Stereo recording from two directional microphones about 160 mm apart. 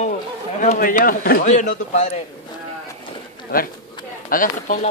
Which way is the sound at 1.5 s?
45° left (ahead or behind).